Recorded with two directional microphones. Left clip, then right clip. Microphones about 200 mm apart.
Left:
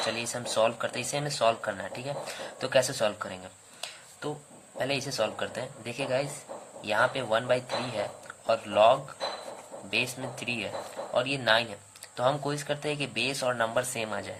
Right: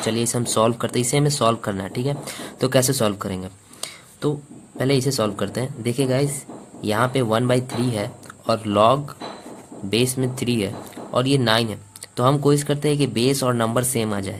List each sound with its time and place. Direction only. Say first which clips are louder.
0.1 s speech: right 8 dB; 35° right (ahead or behind)
4.8 s speech: right 8 dB; 35° right (ahead or behind)